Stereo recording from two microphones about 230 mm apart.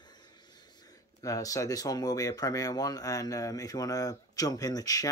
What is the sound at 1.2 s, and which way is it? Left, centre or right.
A man's voice, centre.